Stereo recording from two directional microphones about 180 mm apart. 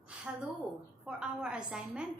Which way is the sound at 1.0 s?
5° right (ahead or behind).